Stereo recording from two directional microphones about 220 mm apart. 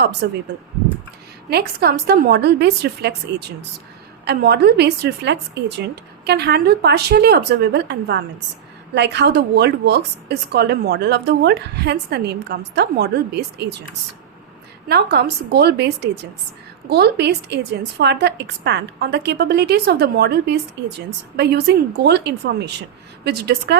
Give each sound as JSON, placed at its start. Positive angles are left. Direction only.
{"t": 0.2, "sound": "a woman's voice", "side_deg": -50}
{"t": 1.5, "sound": "a woman's voice", "side_deg": -45}
{"t": 4.3, "sound": "a woman's voice", "side_deg": -50}
{"t": 14.8, "sound": "a woman's voice", "side_deg": -45}